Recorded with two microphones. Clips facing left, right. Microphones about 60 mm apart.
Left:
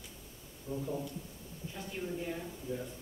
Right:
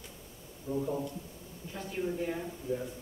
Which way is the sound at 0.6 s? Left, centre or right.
Right.